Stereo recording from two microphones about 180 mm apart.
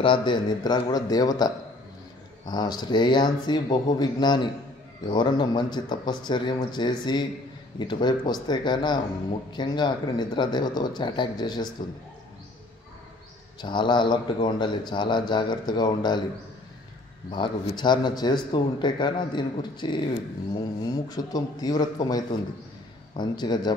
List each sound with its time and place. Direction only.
0.0 s a man's voice: 25° left (ahead or behind)
13.6 s a man's voice: 25° left (ahead or behind)
17.3 s a man's voice: 30° left (ahead or behind)